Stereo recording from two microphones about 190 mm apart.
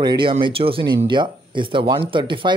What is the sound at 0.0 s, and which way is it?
Speech, 25° right (ahead or behind).